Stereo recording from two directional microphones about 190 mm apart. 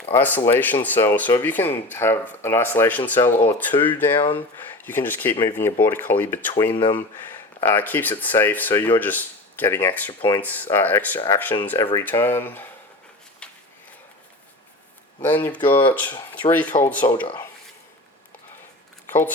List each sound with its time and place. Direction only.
0.1 s speech: 10° left (ahead or behind)
6.7 s speech: 25° left (ahead or behind)
7.3 s speech: 10° left (ahead or behind)
10.1 s speech: 25° left (ahead or behind)
10.4 s speech: 10° left (ahead or behind)
13.4 s a sound: 5° left (ahead or behind)
15.2 s speech: 10° left (ahead or behind)
19.0 s shuffling cards: 10° left (ahead or behind)